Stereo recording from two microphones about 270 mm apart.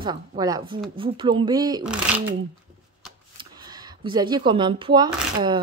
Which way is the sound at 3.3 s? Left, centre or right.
Centre.